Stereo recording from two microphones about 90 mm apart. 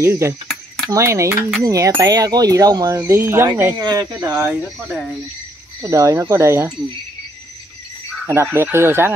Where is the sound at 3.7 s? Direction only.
45° right (ahead or behind).